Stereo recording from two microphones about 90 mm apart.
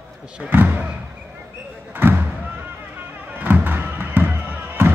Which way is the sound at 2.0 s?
25° right (ahead or behind).